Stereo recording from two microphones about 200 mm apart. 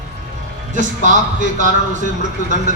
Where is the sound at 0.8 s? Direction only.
40° right (ahead or behind).